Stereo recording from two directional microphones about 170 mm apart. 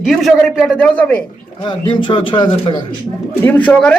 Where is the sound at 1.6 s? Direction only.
30° left (ahead or behind).